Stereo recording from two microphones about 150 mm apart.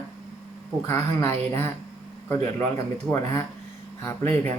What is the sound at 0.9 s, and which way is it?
Speech, 15° left (ahead or behind).